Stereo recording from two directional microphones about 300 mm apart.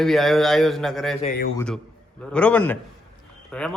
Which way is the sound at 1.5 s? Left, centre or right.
Centre.